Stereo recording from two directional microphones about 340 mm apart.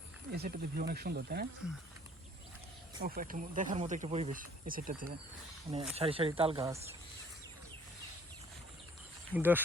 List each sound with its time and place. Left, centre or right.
0.3 s speech: right
3.0 s speech: right
9.3 s speech: centre